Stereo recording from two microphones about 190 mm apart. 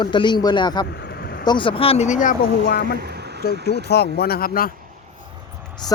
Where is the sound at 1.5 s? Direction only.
25° left (ahead or behind); by 2.5 s 45° left (ahead or behind).